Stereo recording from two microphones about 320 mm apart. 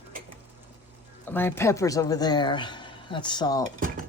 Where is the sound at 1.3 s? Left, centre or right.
Centre.